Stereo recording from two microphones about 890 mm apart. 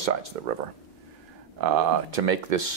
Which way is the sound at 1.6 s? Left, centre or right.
Right.